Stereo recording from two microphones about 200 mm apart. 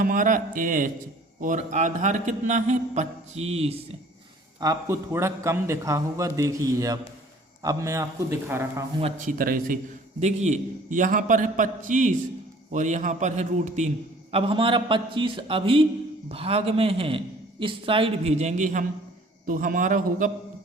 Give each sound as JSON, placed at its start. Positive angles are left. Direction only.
{"t": 0.0, "sound": "a man's voice", "side_deg": -40}
{"t": 4.6, "sound": "a man's voice", "side_deg": -15}
{"t": 9.0, "sound": "a man's voice", "side_deg": -35}
{"t": 10.2, "sound": "a man's voice", "side_deg": -35}